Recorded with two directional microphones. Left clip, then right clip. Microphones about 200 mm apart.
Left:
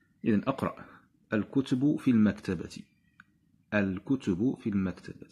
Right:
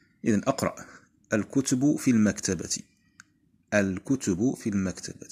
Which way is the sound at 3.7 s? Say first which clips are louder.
Right 4 dB; 15° right (ahead or behind).